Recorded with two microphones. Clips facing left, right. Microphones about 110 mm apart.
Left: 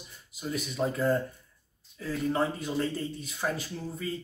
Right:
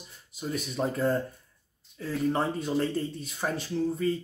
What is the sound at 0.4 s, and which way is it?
Speech, 30° right (ahead or behind).